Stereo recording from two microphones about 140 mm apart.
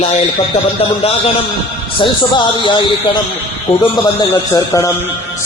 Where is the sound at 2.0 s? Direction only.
35° left (ahead or behind).